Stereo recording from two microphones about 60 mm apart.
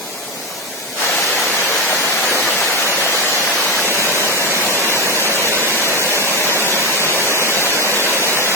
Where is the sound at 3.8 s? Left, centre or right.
Right.